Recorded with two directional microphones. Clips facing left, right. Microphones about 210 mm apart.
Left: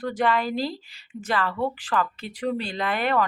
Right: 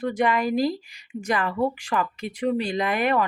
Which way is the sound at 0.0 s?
10° right (ahead or behind).